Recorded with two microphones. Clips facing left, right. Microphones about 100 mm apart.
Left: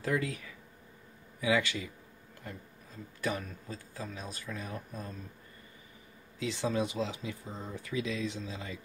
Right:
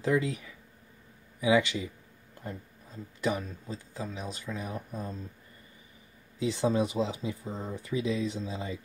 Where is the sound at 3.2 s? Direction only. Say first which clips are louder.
Right 4 dB; 20° right (ahead or behind).